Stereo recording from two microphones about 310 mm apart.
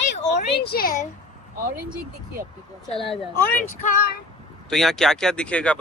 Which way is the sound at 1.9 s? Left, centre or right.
Centre.